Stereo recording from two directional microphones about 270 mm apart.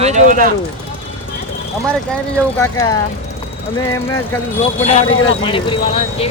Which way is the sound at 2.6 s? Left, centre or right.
Centre.